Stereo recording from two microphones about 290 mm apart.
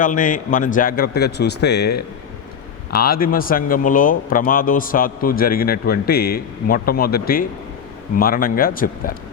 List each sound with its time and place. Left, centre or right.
0.0 s speech: left